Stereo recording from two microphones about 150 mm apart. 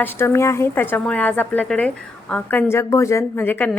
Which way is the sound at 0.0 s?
15° left (ahead or behind).